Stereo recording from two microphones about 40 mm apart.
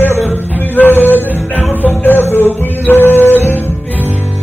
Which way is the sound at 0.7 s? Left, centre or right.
Left.